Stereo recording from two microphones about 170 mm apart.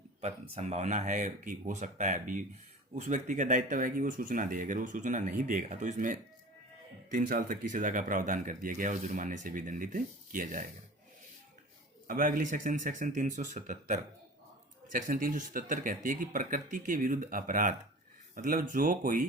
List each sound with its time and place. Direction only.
0.2 s speech: 40° right (ahead or behind)
12.0 s speech: 55° right (ahead or behind)